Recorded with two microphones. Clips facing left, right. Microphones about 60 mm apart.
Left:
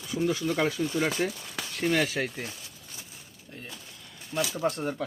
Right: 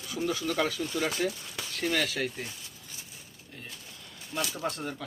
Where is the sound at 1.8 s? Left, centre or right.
Centre.